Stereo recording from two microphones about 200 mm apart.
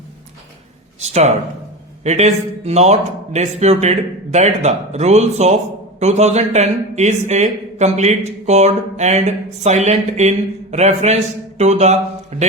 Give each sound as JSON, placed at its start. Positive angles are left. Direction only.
{"t": 0.9, "sound": "a man's voice", "side_deg": -35}